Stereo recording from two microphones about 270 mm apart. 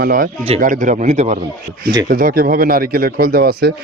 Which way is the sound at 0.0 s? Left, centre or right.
Right.